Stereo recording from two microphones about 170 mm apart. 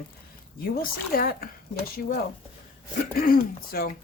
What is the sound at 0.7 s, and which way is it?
Speech, 60° left (ahead or behind).